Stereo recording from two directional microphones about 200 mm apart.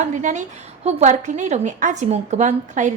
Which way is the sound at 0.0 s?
40° right (ahead or behind).